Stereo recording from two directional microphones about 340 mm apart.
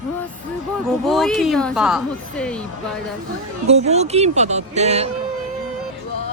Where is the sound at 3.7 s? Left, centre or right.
Centre.